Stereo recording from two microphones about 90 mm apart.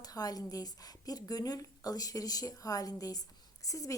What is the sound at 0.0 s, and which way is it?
A woman's voice, 45° left (ahead or behind).